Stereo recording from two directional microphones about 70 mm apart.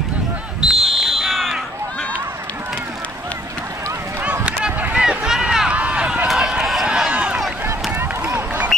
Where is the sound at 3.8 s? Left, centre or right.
Right.